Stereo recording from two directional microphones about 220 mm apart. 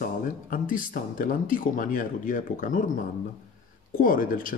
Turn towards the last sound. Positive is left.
turn(degrees=40)  # may be behind; listen again after turning